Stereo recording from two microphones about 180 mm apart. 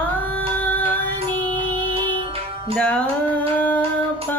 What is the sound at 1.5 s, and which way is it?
Music, 30° right (ahead or behind).